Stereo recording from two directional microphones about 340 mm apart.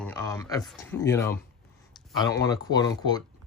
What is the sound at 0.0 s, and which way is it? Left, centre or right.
Speech, centre.